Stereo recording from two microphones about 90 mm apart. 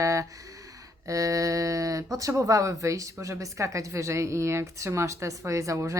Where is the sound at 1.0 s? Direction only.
40° right (ahead or behind).